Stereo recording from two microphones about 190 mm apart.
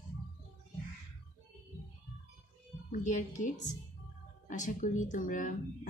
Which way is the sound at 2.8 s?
40° left (ahead or behind).